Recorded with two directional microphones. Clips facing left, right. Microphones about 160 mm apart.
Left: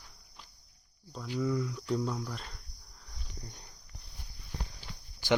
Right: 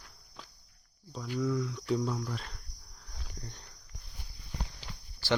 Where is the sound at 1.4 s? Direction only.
Centre (ahead or behind).